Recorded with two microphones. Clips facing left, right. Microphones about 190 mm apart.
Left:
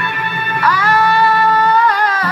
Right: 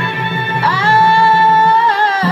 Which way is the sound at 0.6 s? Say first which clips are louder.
Right 1 dB; 25° right (ahead or behind).